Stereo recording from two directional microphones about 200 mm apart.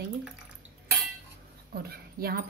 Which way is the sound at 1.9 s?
50° right (ahead or behind).